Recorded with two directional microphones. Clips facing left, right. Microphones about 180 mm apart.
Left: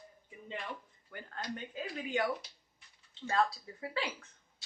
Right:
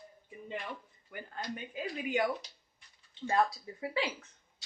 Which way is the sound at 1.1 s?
10° right (ahead or behind).